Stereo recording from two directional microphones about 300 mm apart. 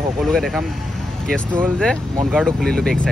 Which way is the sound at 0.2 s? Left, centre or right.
Centre.